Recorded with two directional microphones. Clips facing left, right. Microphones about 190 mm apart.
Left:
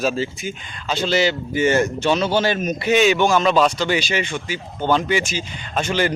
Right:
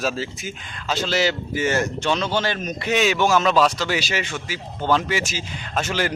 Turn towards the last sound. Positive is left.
turn(degrees=-5)  # may be behind; listen again after turning